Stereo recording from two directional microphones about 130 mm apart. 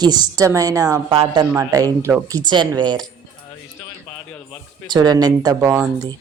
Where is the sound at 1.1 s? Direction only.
40° right (ahead or behind).